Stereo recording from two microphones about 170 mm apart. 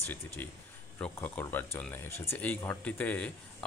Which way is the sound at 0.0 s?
10° left (ahead or behind).